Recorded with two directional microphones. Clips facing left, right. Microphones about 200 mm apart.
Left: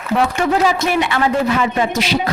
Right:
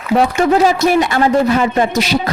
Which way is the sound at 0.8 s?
40° right (ahead or behind).